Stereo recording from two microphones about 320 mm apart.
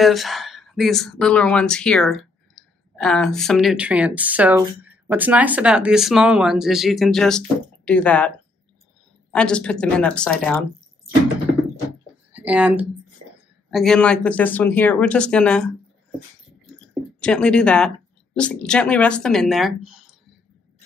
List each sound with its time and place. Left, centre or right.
0.0 s speech: centre
9.3 s speech: centre
12.3 s speech: centre
17.2 s speech: centre